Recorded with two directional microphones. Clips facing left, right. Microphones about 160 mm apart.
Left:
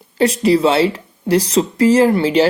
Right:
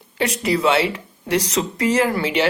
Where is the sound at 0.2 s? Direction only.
30° left (ahead or behind).